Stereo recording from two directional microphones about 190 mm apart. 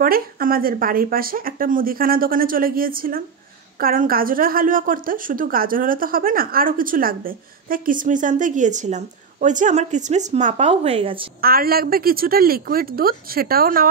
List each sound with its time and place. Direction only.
0.0 s a woman's voice: 50° right (ahead or behind); by 11.2 s 30° right (ahead or behind)
11.4 s a woman's voice: 50° right (ahead or behind)